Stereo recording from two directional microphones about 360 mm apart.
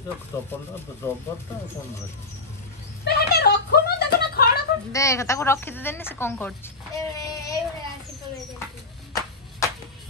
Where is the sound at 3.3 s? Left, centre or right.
Left.